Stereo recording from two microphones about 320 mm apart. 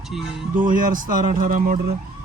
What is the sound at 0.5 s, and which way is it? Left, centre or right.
Speech, right.